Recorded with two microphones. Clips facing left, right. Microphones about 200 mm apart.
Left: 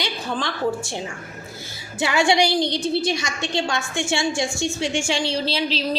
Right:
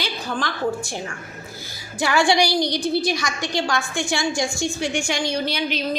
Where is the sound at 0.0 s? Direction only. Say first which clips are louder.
Even; 25° left (ahead or behind).